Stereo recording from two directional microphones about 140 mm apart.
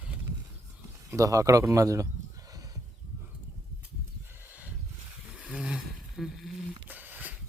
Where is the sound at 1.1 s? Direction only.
25° right (ahead or behind).